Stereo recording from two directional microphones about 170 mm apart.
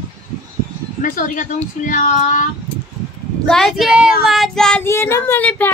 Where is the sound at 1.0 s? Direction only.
50° left (ahead or behind).